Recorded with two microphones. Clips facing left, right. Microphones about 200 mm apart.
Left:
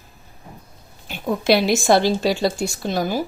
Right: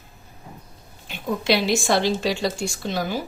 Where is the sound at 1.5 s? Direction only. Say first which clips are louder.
Left 5 dB; 40° left (ahead or behind).